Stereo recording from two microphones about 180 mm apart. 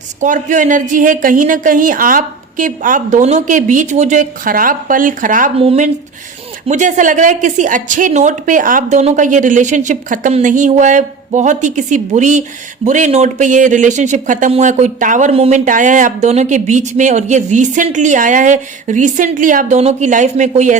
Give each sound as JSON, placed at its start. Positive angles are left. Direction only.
{"t": 0.2, "sound": "speech", "side_deg": -45}
{"t": 5.5, "sound": "speech", "side_deg": -35}